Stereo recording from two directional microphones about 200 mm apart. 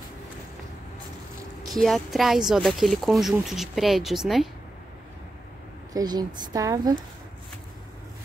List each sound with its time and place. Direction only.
1.7 s speech: centre (ahead or behind)
5.9 s speech: 20° right (ahead or behind)